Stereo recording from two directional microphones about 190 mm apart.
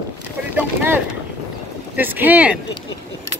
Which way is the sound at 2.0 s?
10° right (ahead or behind).